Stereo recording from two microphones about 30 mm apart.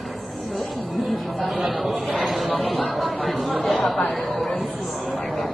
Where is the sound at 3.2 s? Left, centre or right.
Centre.